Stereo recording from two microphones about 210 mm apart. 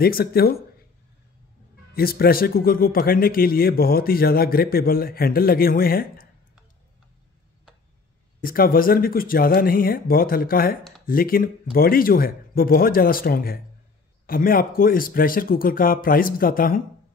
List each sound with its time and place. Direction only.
0.0 s speech: 45° left (ahead or behind)
2.0 s speech: 45° left (ahead or behind)
8.4 s speech: 45° left (ahead or behind)